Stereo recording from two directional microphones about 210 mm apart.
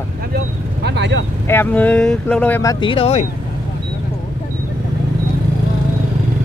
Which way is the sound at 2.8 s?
25° left (ahead or behind).